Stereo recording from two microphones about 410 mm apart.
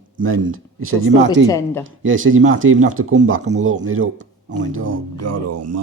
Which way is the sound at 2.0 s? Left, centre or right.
Right.